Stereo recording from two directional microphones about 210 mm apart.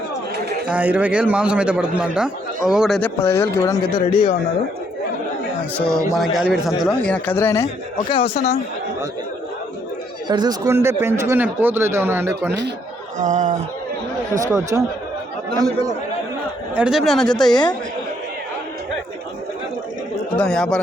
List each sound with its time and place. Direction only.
0.7 s a man's voice: 5° right (ahead or behind)
3.2 s speech: 10° left (ahead or behind)
3.9 s speech: 25° left (ahead or behind)
6.1 s a man's voice: centre (ahead or behind)
8.1 s speech: 30° left (ahead or behind)
10.2 s a man's voice: 20° right (ahead or behind)
13.1 s speech: 35° right (ahead or behind)
14.4 s a man's voice: 15° right (ahead or behind)
16.7 s a man's voice: 5° right (ahead or behind)
17.5 s speech: 20° left (ahead or behind)
20.3 s speech: 5° left (ahead or behind)